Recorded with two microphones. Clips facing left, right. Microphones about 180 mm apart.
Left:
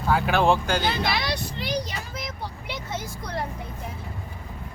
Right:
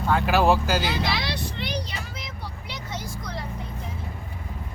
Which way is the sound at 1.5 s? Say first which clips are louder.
Left 2 dB; 40° left (ahead or behind).